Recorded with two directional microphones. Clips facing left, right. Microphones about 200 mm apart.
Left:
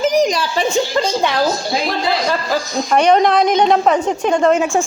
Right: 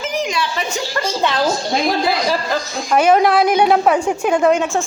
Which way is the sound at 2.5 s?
5° right (ahead or behind).